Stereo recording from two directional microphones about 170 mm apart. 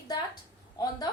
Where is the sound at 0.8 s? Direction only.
20° left (ahead or behind).